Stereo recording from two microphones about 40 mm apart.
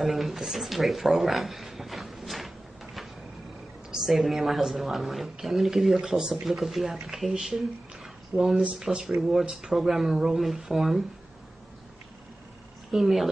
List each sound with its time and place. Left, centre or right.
0.0 s a sound: centre
3.9 s a woman's voice: centre
8.3 s speech: right
8.8 s speech: centre
12.9 s a woman's voice: centre